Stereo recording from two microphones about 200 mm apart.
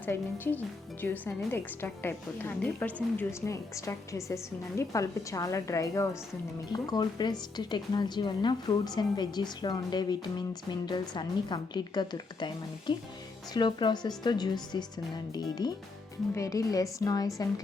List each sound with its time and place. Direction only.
0.0 s a woman's voice: 10° left (ahead or behind)